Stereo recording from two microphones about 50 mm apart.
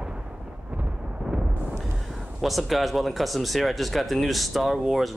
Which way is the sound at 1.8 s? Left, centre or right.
Centre.